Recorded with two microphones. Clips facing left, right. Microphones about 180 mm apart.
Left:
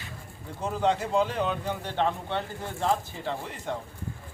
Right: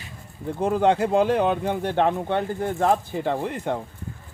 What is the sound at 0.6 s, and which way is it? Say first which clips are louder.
Speech: right 7 dB; 60° right (ahead or behind).